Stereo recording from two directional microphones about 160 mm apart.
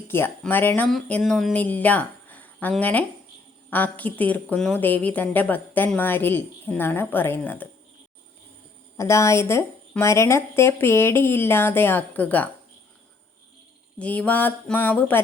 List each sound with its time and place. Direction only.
0.1 s a woman's voice: 15° left (ahead or behind)
9.0 s a woman's voice: 20° left (ahead or behind)
14.0 s a woman's voice: 10° left (ahead or behind)